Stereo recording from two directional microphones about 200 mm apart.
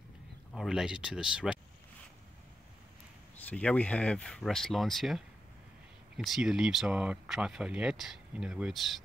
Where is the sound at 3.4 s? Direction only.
5° left (ahead or behind).